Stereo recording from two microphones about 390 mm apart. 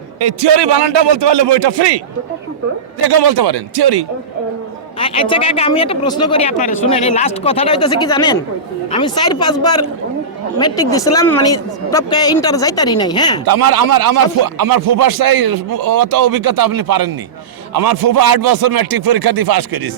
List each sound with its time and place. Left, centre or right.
0.2 s a man's voice: right
3.0 s speech: right
4.9 s a woman's voice: centre
13.5 s a man's voice: right